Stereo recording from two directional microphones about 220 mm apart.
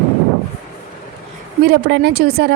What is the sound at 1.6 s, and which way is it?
Speech, 50° right (ahead or behind).